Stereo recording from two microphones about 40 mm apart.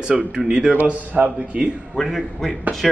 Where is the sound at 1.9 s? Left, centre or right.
Centre.